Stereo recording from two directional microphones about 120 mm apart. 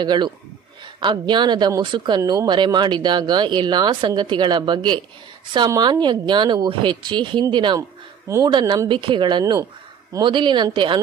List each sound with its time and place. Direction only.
0.0 s speech: 40° right (ahead or behind)
9.4 s speech: 30° right (ahead or behind)
10.2 s speech: 45° right (ahead or behind)